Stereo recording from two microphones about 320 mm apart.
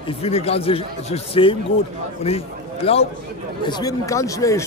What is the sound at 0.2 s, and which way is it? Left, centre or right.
A man's voice, centre.